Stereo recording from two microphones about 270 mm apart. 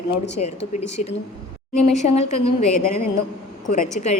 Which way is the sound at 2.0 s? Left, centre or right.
Left.